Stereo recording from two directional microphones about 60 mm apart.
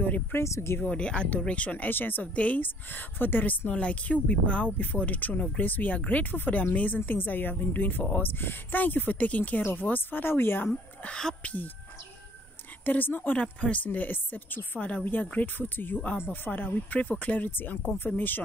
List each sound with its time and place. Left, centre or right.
0.0 s speech: left
0.4 s speech: left
0.7 s a woman's voice: left
9.6 s a woman's voice: left
12.8 s a woman's voice: left
13.4 s a woman's voice: left